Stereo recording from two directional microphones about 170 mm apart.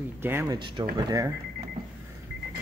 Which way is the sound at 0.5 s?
25° right (ahead or behind).